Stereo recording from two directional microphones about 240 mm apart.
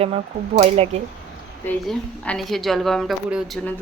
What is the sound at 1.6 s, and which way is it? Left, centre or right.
A woman's voice, centre.